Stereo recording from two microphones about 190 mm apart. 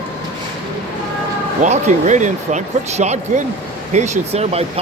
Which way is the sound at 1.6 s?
40° right (ahead or behind).